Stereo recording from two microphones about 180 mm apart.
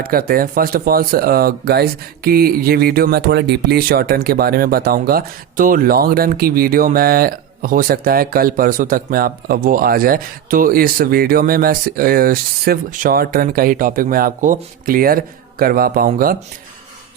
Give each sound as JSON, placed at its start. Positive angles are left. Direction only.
{"t": 0.0, "sound": "speech", "side_deg": -55}